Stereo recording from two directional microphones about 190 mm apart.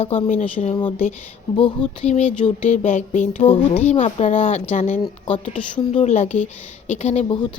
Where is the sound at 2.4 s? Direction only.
40° left (ahead or behind).